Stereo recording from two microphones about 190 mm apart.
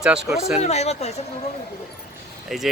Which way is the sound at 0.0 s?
5° right (ahead or behind).